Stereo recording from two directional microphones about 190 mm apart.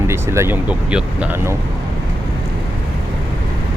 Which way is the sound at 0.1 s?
15° right (ahead or behind).